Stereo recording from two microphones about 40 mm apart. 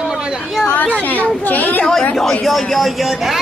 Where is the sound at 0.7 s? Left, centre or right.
Left.